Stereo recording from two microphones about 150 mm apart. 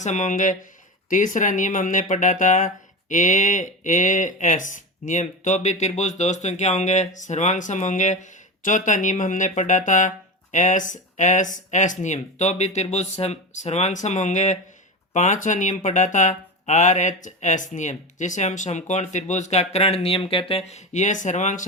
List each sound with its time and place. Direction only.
0.0 s speech: 55° left (ahead or behind)